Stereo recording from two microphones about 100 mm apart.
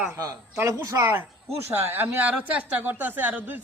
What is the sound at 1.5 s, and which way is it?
A woman's voice, 20° right (ahead or behind).